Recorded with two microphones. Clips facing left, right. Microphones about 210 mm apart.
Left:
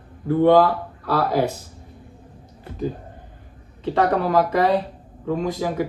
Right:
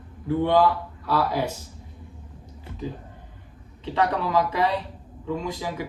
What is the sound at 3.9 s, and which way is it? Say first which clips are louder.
Speech: left 5 dB; 50° left (ahead or behind).